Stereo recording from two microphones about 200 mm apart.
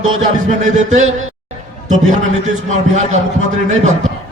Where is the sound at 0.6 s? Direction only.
35° right (ahead or behind).